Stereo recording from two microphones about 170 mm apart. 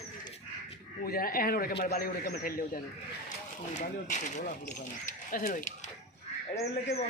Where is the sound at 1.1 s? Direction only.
60° left (ahead or behind).